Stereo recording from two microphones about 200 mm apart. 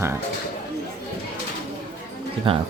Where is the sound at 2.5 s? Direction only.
25° right (ahead or behind).